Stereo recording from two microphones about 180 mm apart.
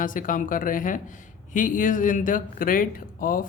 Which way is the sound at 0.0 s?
50° left (ahead or behind).